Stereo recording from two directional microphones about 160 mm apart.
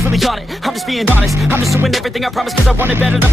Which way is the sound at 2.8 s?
10° right (ahead or behind).